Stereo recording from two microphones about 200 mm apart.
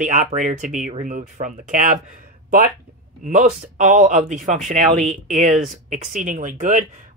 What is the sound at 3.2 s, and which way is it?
Speech, 40° right (ahead or behind).